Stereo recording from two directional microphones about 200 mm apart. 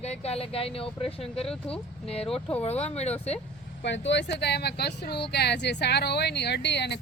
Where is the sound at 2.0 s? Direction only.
30° left (ahead or behind).